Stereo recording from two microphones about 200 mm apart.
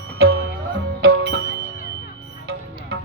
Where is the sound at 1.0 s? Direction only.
55° right (ahead or behind).